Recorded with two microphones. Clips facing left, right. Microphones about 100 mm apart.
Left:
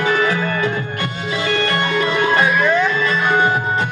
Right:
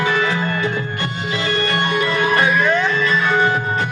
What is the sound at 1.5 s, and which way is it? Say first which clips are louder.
Music: even; 15° right (ahead or behind).